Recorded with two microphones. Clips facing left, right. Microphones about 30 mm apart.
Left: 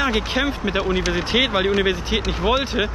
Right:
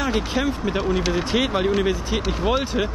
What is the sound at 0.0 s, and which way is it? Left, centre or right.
Speech, left.